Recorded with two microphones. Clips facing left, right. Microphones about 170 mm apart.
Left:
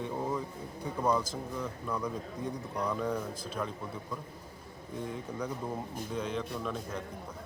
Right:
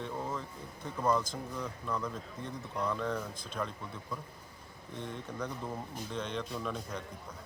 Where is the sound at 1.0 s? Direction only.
10° left (ahead or behind).